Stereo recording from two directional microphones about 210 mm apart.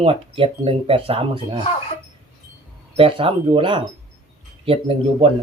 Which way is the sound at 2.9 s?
25° right (ahead or behind).